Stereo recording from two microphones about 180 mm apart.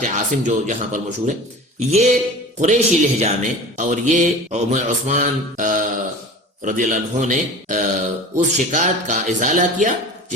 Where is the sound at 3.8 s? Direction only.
40° right (ahead or behind).